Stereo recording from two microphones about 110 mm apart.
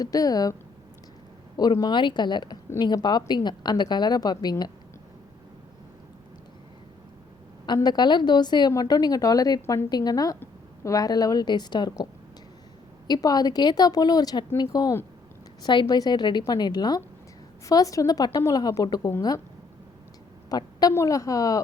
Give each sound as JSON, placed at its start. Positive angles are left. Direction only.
{"t": 0.0, "sound": "a woman's voice", "side_deg": 35}
{"t": 1.5, "sound": "a woman's voice", "side_deg": 40}
{"t": 7.9, "sound": "a woman's voice", "side_deg": 40}
{"t": 9.9, "sound": "a woman's voice", "side_deg": 35}
{"t": 13.1, "sound": "a woman's voice", "side_deg": 35}
{"t": 20.5, "sound": "a woman's voice", "side_deg": 35}